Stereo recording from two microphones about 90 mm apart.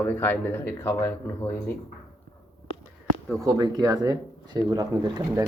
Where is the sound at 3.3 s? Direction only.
45° right (ahead or behind).